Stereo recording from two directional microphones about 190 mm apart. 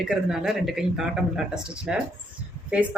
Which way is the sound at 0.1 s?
Centre (ahead or behind).